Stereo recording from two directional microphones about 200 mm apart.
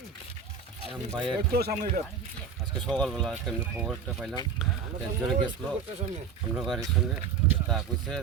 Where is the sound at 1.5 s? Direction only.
50° right (ahead or behind).